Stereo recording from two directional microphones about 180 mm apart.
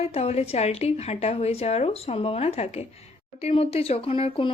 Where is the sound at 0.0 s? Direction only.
35° left (ahead or behind).